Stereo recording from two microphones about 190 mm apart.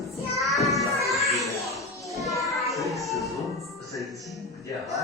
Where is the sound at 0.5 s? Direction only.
Centre (ahead or behind).